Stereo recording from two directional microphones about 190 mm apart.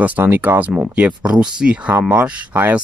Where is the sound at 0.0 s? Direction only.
10° right (ahead or behind).